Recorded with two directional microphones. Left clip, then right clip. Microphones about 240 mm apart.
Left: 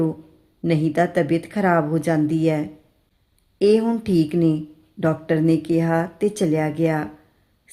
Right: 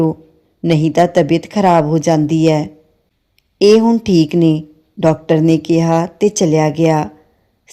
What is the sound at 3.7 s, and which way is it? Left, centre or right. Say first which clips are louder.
Speech: right 8 dB; right.